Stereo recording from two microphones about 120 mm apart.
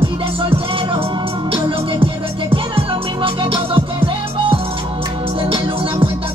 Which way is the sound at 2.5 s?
45° right (ahead or behind).